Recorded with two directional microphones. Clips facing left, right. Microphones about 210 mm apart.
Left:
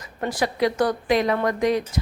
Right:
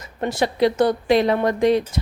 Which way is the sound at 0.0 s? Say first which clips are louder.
Right 3 dB; 25° right (ahead or behind).